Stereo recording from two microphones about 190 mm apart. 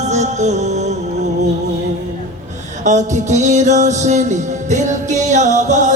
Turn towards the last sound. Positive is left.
turn(degrees=-40)  # may be behind; listen again after turning